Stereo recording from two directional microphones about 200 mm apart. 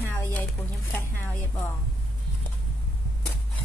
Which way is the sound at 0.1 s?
10° left (ahead or behind).